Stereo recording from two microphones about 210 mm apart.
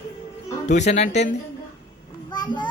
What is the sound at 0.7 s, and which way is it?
Speech, 35° left (ahead or behind).